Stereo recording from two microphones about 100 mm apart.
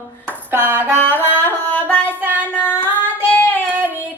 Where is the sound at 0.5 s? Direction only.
20° right (ahead or behind).